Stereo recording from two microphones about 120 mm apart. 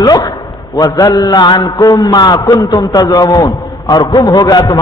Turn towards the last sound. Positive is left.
turn(degrees=35)  # may be behind; listen again after turning